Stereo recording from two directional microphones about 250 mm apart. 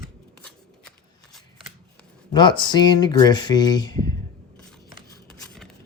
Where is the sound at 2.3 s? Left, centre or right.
Centre.